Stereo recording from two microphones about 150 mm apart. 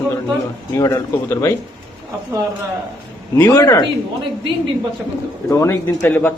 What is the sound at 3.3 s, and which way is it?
Speech, 25° left (ahead or behind).